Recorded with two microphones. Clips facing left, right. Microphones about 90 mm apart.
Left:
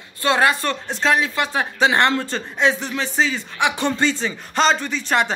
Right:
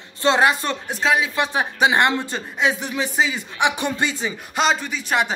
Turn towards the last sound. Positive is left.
turn(degrees=-5)  # may be behind; listen again after turning